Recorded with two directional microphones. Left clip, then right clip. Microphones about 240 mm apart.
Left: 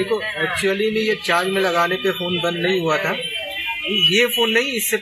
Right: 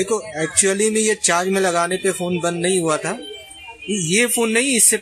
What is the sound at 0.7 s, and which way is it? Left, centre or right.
Speech, right.